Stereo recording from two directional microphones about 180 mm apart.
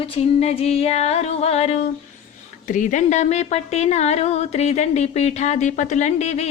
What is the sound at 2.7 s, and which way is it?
A woman's voice, 45° left (ahead or behind).